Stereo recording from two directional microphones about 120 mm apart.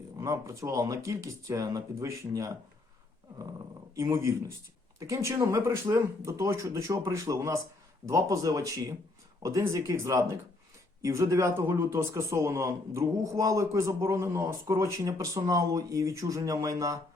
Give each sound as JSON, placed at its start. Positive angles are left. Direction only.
{"t": 0.2, "sound": "a man's voice", "side_deg": -25}
{"t": 3.9, "sound": "a man's voice", "side_deg": -25}